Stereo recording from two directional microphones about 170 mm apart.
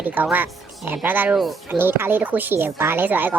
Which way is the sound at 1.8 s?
10° right (ahead or behind).